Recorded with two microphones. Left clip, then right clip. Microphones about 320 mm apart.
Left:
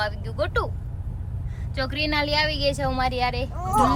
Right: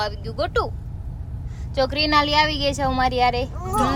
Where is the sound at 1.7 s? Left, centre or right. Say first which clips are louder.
Right 7 dB; centre.